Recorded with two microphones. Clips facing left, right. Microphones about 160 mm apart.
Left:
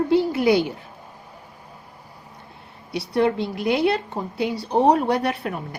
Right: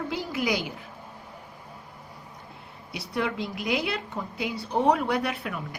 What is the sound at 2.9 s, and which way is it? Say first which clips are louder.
A woman's voice: left 9 dB; 30° left (ahead or behind).